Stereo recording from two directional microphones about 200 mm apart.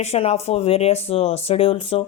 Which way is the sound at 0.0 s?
30° left (ahead or behind).